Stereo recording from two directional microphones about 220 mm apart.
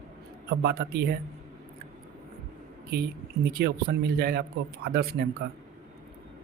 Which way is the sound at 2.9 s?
45° right (ahead or behind).